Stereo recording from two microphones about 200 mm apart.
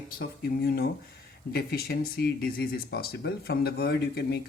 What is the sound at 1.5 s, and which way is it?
Speech, 50° left (ahead or behind).